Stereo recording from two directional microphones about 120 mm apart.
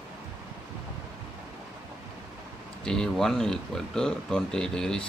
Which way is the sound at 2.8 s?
5° left (ahead or behind).